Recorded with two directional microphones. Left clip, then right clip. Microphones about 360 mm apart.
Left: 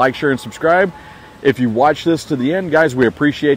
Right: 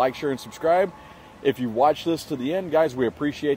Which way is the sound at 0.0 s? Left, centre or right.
Centre.